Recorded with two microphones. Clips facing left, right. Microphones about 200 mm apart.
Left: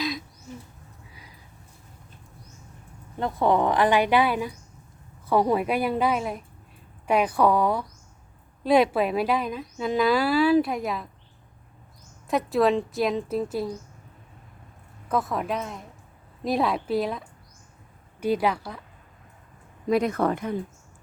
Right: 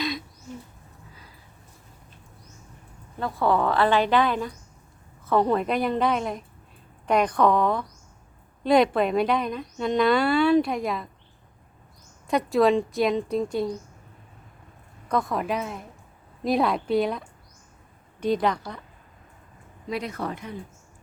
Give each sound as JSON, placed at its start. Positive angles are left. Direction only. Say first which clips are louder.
{"t": 0.0, "sound": "a sound", "louder": "even", "side_deg": 0}
{"t": 3.2, "sound": "a woman's voice", "louder": "left 1 dB", "side_deg": 20}
{"t": 12.3, "sound": "speech", "louder": "right 2 dB", "side_deg": 0}
{"t": 15.1, "sound": "a woman's voice", "louder": "right 1 dB", "side_deg": 0}
{"t": 19.9, "sound": "speech", "louder": "left 8 dB", "side_deg": 50}